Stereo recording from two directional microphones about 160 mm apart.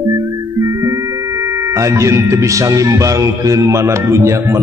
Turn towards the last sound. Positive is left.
turn(degrees=-15)  # may be behind; listen again after turning